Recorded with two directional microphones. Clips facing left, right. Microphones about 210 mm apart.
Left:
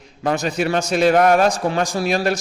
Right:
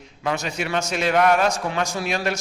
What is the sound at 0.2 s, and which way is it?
A man's voice, 35° left (ahead or behind).